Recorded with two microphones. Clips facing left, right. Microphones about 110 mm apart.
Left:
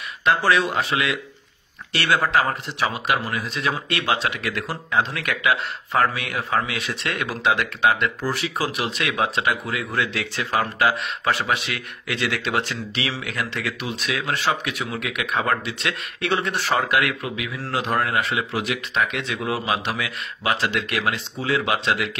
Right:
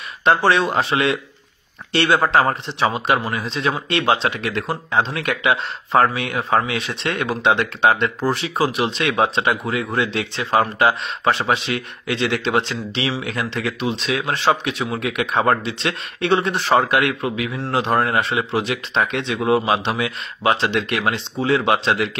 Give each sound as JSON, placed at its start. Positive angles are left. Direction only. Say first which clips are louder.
{"t": 0.2, "sound": "speech", "louder": "right 3 dB", "side_deg": -30}